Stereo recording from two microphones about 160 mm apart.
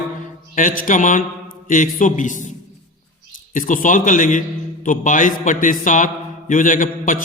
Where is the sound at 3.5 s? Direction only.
55° left (ahead or behind).